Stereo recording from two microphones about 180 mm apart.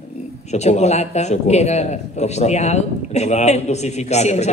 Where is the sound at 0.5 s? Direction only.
40° left (ahead or behind).